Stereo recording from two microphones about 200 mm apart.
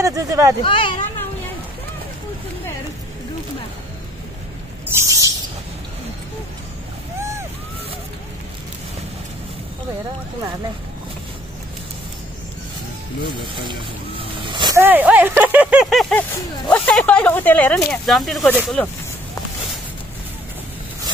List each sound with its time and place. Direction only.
0.0 s speech: 15° right (ahead or behind)
0.7 s speech: 25° left (ahead or behind)
4.9 s speech: 15° right (ahead or behind)
13.6 s vehicle: 25° right (ahead or behind)
14.8 s speech: 10° right (ahead or behind)